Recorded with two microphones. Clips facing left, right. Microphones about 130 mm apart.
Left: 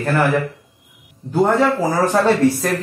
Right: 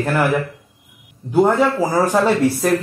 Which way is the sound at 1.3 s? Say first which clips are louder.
Right 1 dB; 10° right (ahead or behind).